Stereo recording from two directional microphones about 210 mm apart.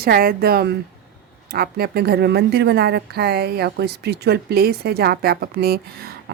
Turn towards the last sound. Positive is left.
turn(degrees=-45)  # may be behind; listen again after turning